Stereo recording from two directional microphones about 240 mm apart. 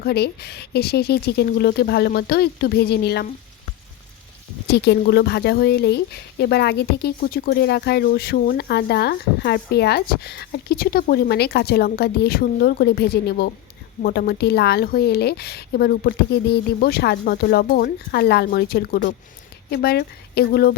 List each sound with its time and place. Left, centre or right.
0.0 s speech: left
4.7 s speech: left